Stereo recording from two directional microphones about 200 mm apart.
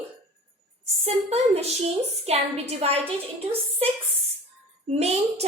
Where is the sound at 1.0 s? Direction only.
30° right (ahead or behind).